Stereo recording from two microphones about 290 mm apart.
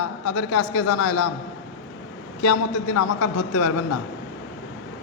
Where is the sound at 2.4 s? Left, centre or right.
Left.